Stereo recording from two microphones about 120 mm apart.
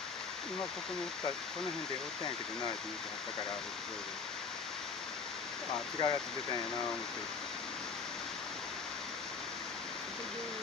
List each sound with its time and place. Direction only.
6.0 s speech: 35° left (ahead or behind)